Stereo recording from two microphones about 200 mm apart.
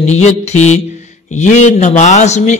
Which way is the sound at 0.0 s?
35° left (ahead or behind).